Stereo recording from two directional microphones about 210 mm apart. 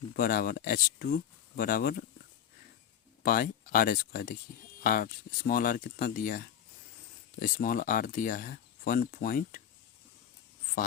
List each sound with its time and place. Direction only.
0.2 s speech: 45° left (ahead or behind)
3.2 s speech: 45° left (ahead or behind)